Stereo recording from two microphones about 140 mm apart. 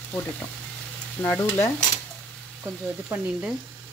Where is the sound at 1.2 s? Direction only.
10° left (ahead or behind).